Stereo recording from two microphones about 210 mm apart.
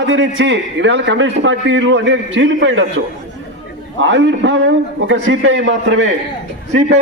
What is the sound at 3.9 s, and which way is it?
A man's voice, 60° right (ahead or behind).